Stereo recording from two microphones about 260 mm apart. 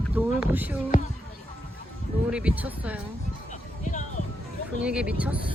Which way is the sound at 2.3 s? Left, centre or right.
Centre.